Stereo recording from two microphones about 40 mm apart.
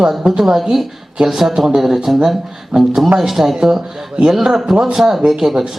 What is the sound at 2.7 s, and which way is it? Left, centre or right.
Speech, centre.